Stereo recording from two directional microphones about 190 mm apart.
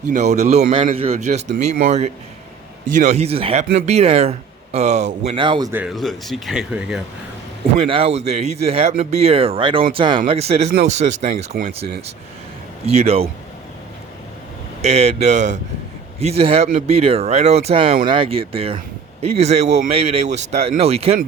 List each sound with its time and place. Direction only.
0.1 s speech: 35° right (ahead or behind)
5.7 s speech: 5° right (ahead or behind)
7.8 s speech: 30° right (ahead or behind)
14.8 s speech: 35° right (ahead or behind)